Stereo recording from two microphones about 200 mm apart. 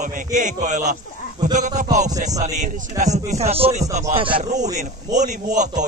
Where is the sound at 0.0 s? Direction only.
40° right (ahead or behind).